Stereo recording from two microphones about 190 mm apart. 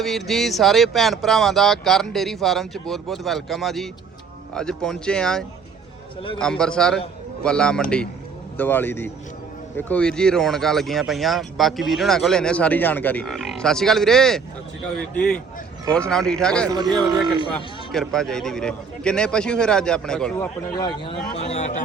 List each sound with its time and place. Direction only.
0.0 s a man's voice: centre (ahead or behind)
16.6 s speech: 20° right (ahead or behind)
17.5 s speech: centre (ahead or behind)
20.7 s speech: 25° left (ahead or behind)